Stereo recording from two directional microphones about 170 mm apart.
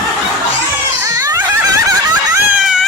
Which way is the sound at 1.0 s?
20° right (ahead or behind).